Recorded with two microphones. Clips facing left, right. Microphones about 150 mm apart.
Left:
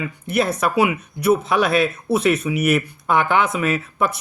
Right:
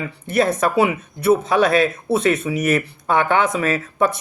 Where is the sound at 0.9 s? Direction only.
30° right (ahead or behind).